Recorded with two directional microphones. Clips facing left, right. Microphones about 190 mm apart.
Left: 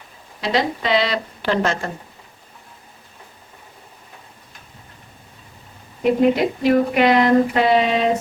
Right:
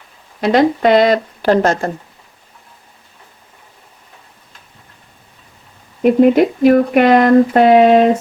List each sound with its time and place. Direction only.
0.4 s speech: 50° right (ahead or behind)
6.0 s speech: 50° right (ahead or behind)